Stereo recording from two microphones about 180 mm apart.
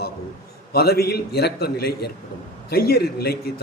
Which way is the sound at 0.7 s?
60° left (ahead or behind).